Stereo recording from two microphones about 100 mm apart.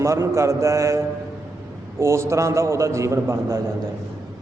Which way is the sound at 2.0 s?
30° right (ahead or behind).